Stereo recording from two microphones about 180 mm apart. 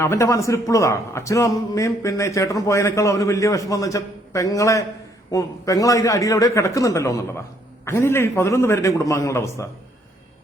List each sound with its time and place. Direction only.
0.0 s a man's voice: 15° left (ahead or behind)